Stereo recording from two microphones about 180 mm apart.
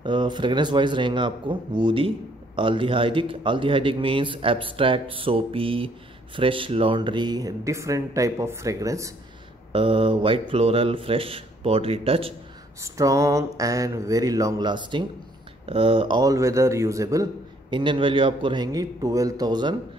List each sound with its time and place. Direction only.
0.0 s a man's voice: 25° right (ahead or behind)
9.7 s a man's voice: 30° right (ahead or behind)
12.8 s a man's voice: 20° right (ahead or behind)